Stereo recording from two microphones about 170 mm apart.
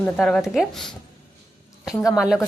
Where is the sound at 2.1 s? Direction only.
5° right (ahead or behind).